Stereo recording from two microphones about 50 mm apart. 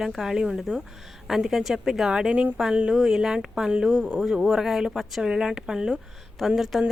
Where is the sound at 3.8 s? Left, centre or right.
Right.